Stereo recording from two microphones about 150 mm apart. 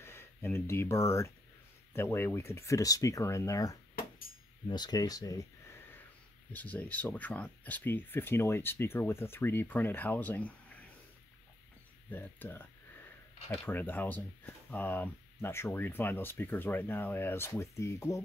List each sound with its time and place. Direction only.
0.0 s speech: 15° left (ahead or behind)
12.1 s speech: 10° left (ahead or behind)